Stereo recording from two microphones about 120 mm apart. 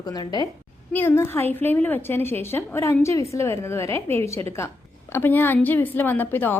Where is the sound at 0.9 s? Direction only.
20° left (ahead or behind).